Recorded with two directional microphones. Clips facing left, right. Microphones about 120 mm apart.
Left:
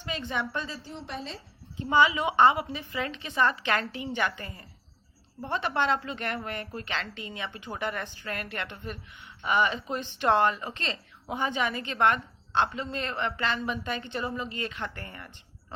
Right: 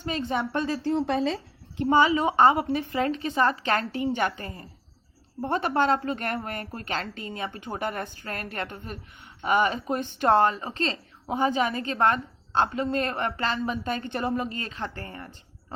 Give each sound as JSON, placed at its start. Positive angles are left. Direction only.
{"t": 0.0, "sound": "a woman's voice", "side_deg": -40}
{"t": 1.9, "sound": "a woman's voice", "side_deg": -40}